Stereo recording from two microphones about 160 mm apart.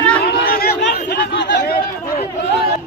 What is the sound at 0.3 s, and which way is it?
Chatter, 80° left.